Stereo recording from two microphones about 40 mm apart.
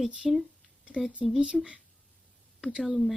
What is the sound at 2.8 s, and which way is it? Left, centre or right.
Speech, centre.